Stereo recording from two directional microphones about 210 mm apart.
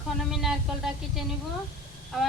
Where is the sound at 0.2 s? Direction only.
Centre (ahead or behind).